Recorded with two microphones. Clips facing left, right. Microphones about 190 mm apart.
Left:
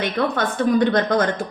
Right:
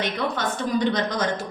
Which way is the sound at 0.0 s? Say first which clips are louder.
Left 4 dB; 55° left (ahead or behind).